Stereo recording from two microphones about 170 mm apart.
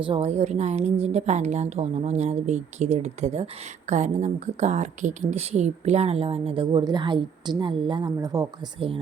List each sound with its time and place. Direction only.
0.0 s a woman's voice: 35° right (ahead or behind)